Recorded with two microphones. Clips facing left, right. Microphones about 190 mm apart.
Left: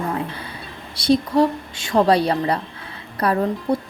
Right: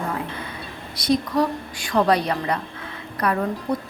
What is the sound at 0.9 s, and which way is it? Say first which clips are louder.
A woman's voice: left 4 dB; 30° left (ahead or behind).